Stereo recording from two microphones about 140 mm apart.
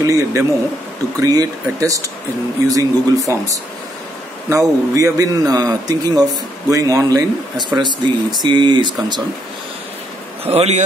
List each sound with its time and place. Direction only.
0.0 s a man's voice: 20° right (ahead or behind)
10.4 s a man's voice: 45° right (ahead or behind)